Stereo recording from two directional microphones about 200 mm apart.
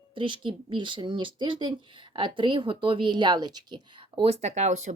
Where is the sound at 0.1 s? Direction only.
25° right (ahead or behind).